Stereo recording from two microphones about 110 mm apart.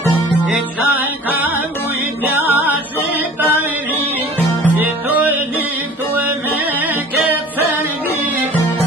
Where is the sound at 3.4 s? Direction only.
15° right (ahead or behind).